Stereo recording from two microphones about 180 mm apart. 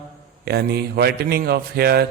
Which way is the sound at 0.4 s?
65° right (ahead or behind).